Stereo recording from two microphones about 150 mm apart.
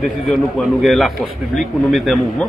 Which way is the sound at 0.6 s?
Centre (ahead or behind).